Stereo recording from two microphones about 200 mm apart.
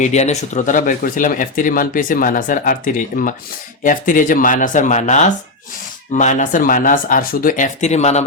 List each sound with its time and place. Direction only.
0.0 s speech: 35° left (ahead or behind)